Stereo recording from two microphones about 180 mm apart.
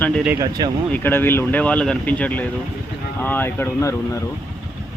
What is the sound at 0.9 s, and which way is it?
Speech, 10° left (ahead or behind).